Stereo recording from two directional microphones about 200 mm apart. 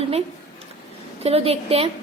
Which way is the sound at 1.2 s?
30° right (ahead or behind).